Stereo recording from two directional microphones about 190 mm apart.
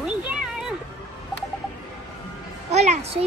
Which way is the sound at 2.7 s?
35° right (ahead or behind).